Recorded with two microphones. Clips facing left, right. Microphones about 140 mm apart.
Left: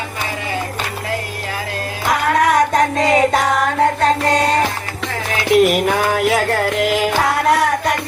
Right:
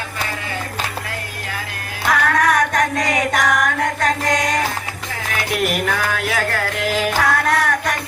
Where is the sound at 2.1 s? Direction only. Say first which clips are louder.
Left 2 dB; 25° left (ahead or behind).